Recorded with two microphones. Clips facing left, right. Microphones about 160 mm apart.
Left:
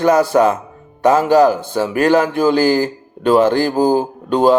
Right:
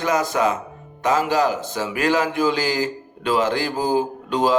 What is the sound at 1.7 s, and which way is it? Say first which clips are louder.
Speech: left 8 dB; 35° left (ahead or behind).